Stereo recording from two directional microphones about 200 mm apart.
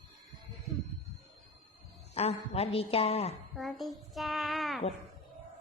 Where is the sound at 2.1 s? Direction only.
30° left (ahead or behind).